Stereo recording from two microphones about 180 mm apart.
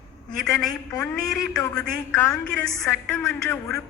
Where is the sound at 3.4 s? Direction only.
5° left (ahead or behind).